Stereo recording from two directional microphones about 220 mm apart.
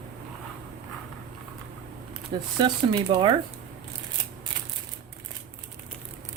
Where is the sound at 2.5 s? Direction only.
20° right (ahead or behind).